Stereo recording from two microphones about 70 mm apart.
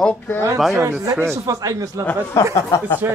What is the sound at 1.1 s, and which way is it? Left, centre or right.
Speech, right.